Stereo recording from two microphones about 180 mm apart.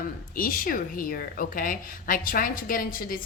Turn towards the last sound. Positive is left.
turn(degrees=50)  # may be behind; listen again after turning